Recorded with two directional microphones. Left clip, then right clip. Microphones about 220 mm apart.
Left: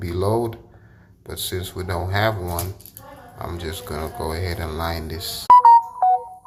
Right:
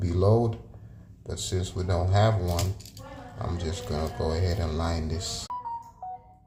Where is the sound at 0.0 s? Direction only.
Centre (ahead or behind).